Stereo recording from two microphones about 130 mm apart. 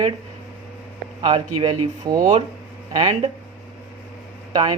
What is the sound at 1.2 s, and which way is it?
Speech, 45° right (ahead or behind).